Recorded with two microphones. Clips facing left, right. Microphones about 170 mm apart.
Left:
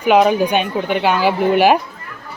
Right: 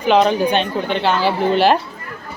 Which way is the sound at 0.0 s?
10° left (ahead or behind).